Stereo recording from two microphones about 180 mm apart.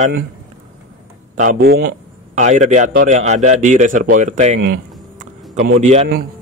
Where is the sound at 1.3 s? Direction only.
45° right (ahead or behind).